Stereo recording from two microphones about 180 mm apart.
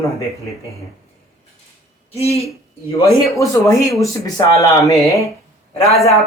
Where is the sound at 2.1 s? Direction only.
35° left (ahead or behind).